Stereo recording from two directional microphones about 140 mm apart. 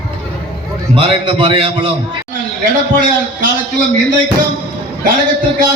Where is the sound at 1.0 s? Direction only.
40° right (ahead or behind).